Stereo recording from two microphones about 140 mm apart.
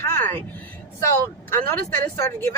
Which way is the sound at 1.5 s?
15° left (ahead or behind).